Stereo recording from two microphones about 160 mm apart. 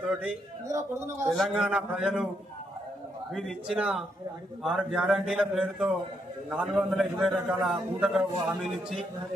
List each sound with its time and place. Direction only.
0.0 s a sound: 5° right (ahead or behind)
0.7 s speech: 15° right (ahead or behind)
1.3 s a man's voice: centre (ahead or behind)
3.3 s a man's voice: centre (ahead or behind)